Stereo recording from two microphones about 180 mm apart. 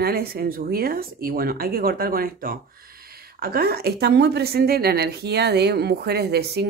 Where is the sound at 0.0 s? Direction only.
60° right (ahead or behind).